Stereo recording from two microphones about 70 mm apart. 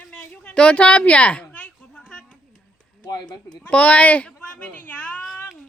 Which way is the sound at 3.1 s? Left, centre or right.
Left.